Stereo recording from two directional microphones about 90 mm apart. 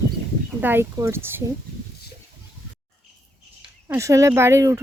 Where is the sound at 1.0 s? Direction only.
35° right (ahead or behind).